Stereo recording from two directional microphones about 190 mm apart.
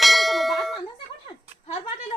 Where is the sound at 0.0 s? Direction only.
Centre (ahead or behind).